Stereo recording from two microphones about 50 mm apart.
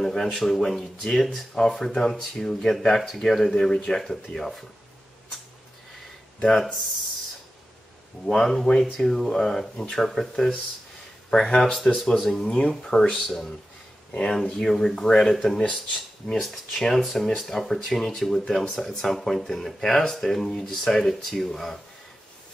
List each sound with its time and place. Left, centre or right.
0.0 s speech: centre
6.4 s speech: centre
8.3 s speech: centre
12.3 s speech: centre
13.1 s speech: centre
14.1 s speech: centre